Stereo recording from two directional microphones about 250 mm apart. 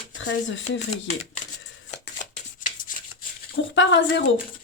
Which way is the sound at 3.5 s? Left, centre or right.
Left.